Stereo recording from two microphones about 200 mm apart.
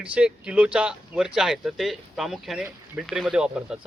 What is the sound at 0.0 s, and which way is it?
Speech, 5° right (ahead or behind).